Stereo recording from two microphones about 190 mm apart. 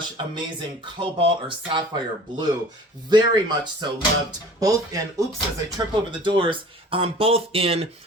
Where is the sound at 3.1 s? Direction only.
25° right (ahead or behind).